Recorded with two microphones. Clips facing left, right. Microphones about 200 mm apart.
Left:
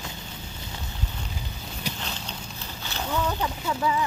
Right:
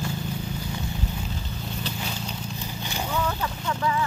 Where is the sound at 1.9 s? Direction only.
10° left (ahead or behind).